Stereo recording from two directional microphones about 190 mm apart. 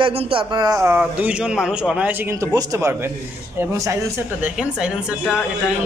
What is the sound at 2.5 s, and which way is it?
A man's voice, 15° right (ahead or behind).